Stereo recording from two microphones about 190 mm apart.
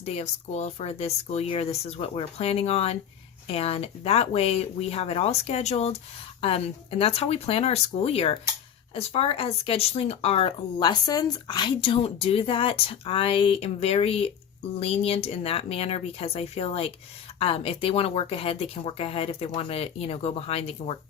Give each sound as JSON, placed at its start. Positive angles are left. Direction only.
{"t": 0.0, "sound": "speech", "side_deg": 35}
{"t": 7.0, "sound": "speech", "side_deg": 30}